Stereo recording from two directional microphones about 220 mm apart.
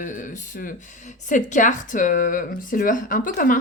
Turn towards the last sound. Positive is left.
turn(degrees=40)  # may be behind; listen again after turning